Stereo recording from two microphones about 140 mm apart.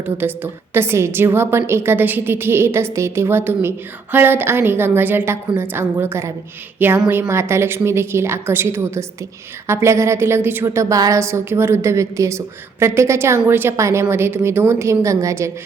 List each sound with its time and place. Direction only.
0.0 s a woman's voice: 15° right (ahead or behind)